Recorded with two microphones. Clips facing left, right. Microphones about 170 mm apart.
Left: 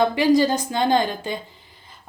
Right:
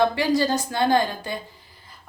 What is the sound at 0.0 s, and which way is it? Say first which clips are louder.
A woman's voice: left 3 dB; 20° left (ahead or behind).